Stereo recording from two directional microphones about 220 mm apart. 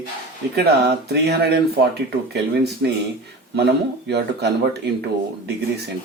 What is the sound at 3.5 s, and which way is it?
Speech, 50° right (ahead or behind).